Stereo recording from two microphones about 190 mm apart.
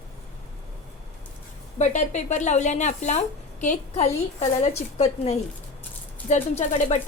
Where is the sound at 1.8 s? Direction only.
40° left (ahead or behind).